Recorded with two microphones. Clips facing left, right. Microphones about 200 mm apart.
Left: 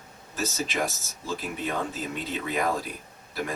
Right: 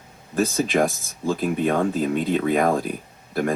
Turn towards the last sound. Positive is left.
turn(degrees=-55)  # may be behind; listen again after turning